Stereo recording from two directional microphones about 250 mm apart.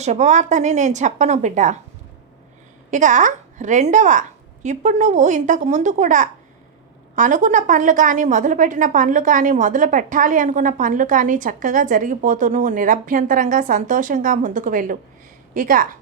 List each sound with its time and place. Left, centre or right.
0.0 s a woman's voice: right
2.9 s a woman's voice: right